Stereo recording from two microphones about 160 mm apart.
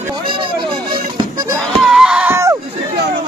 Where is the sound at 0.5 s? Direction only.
30° right (ahead or behind).